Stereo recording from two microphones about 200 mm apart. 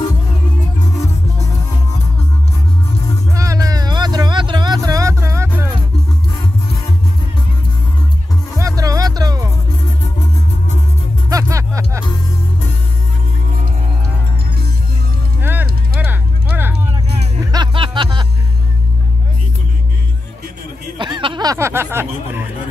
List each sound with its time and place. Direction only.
3.3 s vehicle: 15° right (ahead or behind)
5.2 s music: 15° right (ahead or behind)
8.5 s music: 15° right (ahead or behind)
11.2 s music: 15° right (ahead or behind)
15.4 s a sound: 10° right (ahead or behind)
17.5 s music: 25° right (ahead or behind)
21.0 s a sound: 25° right (ahead or behind)